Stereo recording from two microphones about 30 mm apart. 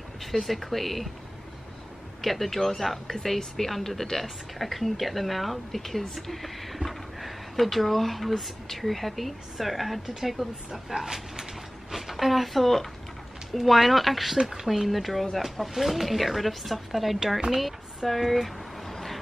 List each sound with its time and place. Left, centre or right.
0.2 s speech: centre
2.2 s a woman's voice: centre
14.4 s speech: centre
14.7 s speech: centre
17.6 s a sound: centre